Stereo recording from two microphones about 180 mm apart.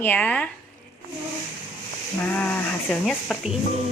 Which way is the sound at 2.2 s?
10° left (ahead or behind).